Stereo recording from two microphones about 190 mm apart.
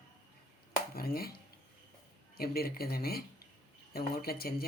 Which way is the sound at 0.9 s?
55° left (ahead or behind).